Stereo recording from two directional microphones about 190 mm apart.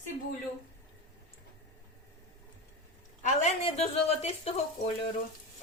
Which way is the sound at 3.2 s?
40° left (ahead or behind).